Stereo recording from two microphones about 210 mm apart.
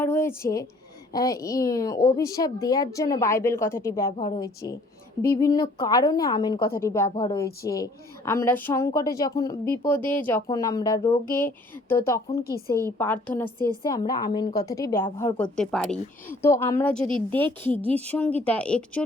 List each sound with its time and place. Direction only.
0.0 s a woman's voice: 10° left (ahead or behind)
12.4 s a woman's voice: 45° left (ahead or behind)
12.7 s a woman's voice: 10° left (ahead or behind)
15.5 s a woman's voice: 5° left (ahead or behind)